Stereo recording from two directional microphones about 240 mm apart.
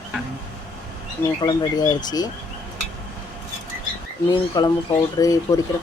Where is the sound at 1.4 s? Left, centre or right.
Centre.